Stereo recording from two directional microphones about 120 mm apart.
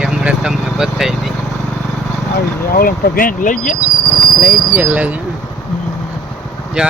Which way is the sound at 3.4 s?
90° left.